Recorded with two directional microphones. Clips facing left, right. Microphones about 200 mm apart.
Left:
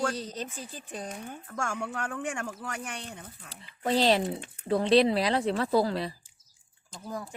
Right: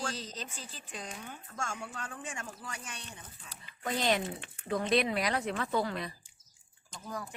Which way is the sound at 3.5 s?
30° left (ahead or behind).